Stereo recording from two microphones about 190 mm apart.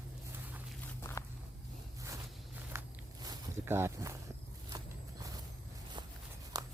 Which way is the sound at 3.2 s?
15° right (ahead or behind).